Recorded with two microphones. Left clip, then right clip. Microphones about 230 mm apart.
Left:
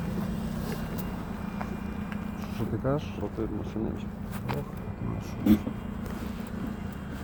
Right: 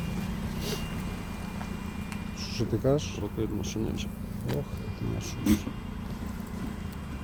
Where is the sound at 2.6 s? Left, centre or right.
Centre.